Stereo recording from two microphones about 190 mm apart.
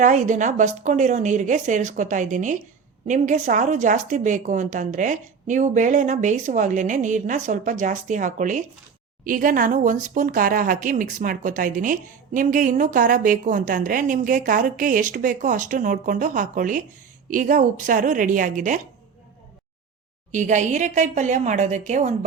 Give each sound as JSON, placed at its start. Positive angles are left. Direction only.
{"t": 0.0, "sound": "a woman's voice", "side_deg": -40}
{"t": 20.3, "sound": "a woman's voice", "side_deg": -40}